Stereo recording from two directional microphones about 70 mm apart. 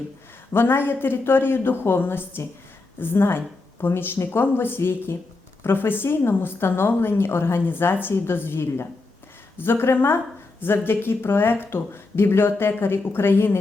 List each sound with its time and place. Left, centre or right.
0.5 s speech: left